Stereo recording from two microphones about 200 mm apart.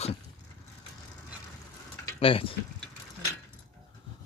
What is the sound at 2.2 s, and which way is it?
Speech, 25° left (ahead or behind).